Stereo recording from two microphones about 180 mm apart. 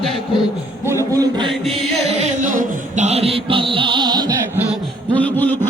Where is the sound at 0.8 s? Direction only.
15° right (ahead or behind).